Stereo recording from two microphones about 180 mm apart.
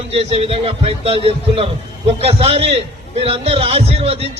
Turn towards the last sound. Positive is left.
turn(degrees=-35)  # may be behind; listen again after turning